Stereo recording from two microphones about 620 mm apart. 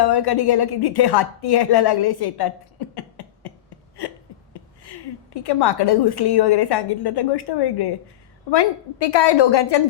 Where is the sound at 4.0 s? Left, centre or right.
Left.